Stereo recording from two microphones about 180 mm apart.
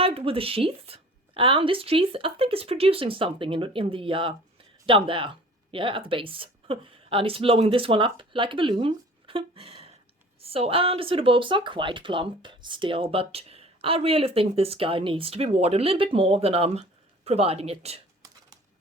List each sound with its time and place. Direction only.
0.0 s speech: 30° right (ahead or behind)